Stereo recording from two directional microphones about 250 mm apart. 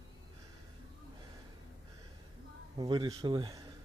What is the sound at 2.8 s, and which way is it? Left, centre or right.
Speech, centre.